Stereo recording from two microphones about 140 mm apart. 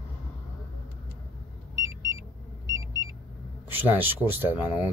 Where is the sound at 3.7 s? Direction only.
15° right (ahead or behind).